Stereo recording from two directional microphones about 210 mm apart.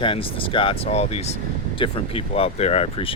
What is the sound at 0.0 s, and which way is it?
Speech, 25° left (ahead or behind).